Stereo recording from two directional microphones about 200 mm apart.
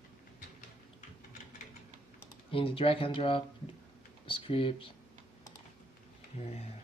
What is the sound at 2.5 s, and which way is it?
Speech, 25° left (ahead or behind).